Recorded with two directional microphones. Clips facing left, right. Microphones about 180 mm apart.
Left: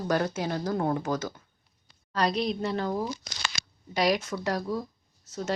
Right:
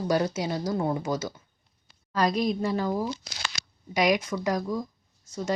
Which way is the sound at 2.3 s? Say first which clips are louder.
Right 2 dB; 45° right (ahead or behind).